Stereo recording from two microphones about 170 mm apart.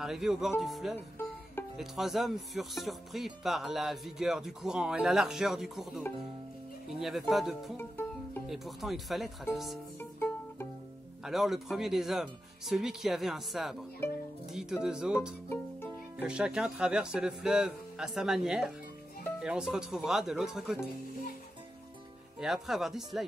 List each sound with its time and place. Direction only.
0.0 s speech: centre (ahead or behind)
9.9 s music: 15° left (ahead or behind)
11.2 s speech: centre (ahead or behind)
22.4 s speech: centre (ahead or behind)